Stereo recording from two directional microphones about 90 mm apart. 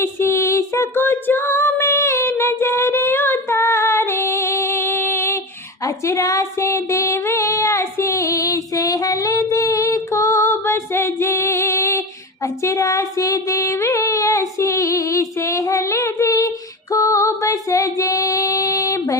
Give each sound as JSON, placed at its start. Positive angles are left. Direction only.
{"t": 0.0, "sound": "female singing", "side_deg": 30}
{"t": 5.8, "sound": "a sound", "side_deg": 40}
{"t": 16.9, "sound": "female singing", "side_deg": 35}